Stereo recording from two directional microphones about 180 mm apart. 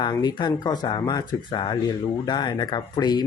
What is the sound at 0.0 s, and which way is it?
Speech, 20° left (ahead or behind).